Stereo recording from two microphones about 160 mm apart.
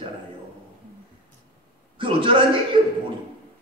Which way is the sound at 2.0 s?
35° right (ahead or behind).